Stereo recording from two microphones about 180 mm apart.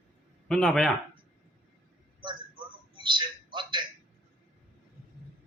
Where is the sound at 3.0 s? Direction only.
25° right (ahead or behind).